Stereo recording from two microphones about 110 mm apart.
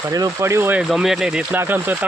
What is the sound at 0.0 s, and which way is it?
Speech, 30° right (ahead or behind).